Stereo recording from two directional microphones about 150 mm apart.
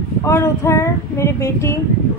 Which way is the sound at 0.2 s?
20° left (ahead or behind).